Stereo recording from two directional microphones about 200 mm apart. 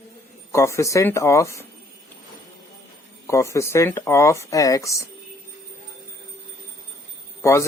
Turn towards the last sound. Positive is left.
turn(degrees=15)  # may be behind; listen again after turning